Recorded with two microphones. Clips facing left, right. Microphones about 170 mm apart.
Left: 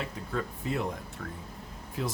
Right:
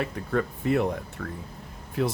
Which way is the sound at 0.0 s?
60° right (ahead or behind).